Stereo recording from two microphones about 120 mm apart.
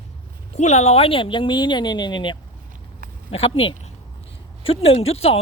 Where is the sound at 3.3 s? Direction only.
50° left (ahead or behind).